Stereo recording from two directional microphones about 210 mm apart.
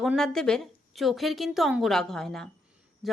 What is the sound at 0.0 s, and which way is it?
A woman's voice, centre (ahead or behind).